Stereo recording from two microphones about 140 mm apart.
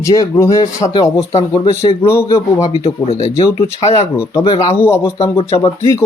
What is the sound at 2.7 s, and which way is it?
Speech, 45° left (ahead or behind).